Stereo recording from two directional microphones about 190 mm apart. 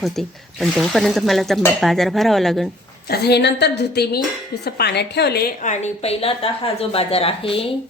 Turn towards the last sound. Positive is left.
turn(degrees=30)  # may be behind; listen again after turning